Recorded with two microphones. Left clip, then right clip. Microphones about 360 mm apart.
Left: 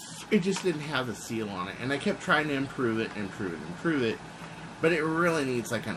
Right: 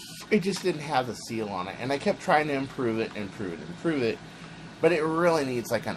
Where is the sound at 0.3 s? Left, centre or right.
Centre.